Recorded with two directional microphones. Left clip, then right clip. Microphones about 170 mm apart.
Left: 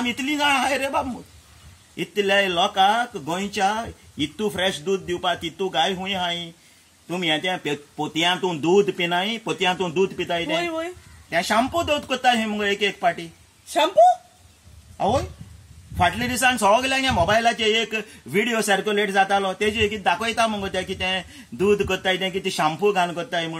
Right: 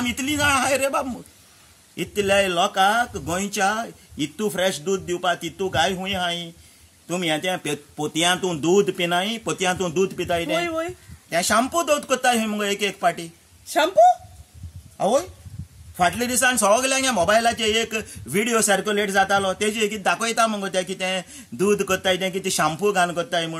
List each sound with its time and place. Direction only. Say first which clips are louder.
0.0 s a man's voice: even; 20° right (ahead or behind)
10.6 s speech: right 1 dB; centre (ahead or behind)
11.2 s a man's voice: even; 25° right (ahead or behind)
13.7 s speech: even; 5° left (ahead or behind)
15.0 s a man's voice: right 1 dB; 25° right (ahead or behind)